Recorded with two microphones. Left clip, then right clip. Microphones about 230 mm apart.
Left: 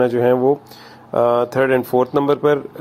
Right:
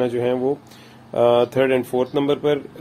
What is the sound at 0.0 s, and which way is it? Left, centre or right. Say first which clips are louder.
Speech: left 6 dB; centre.